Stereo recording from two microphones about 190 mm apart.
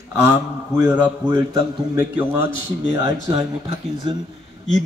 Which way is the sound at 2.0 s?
10° right (ahead or behind).